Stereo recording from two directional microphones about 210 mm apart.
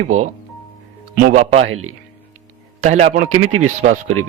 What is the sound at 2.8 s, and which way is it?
Speech, 35° right (ahead or behind).